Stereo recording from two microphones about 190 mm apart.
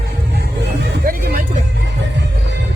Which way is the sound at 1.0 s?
50° right (ahead or behind).